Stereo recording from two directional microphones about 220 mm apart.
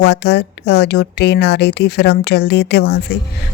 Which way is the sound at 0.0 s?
50° left (ahead or behind).